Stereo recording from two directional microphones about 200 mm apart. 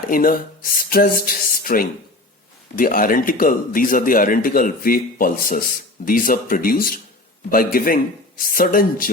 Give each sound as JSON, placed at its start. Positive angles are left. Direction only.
{"t": 0.1, "sound": "a man's voice", "side_deg": 45}